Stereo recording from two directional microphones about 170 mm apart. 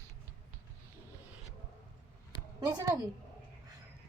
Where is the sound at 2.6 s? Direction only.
20° right (ahead or behind).